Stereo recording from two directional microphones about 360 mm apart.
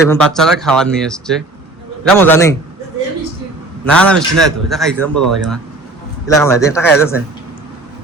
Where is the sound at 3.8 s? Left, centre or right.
Centre.